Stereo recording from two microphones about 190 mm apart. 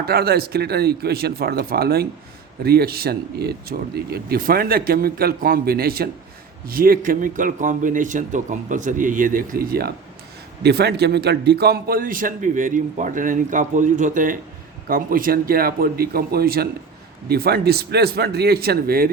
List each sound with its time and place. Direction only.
0.0 s a man's voice: 55° right (ahead or behind)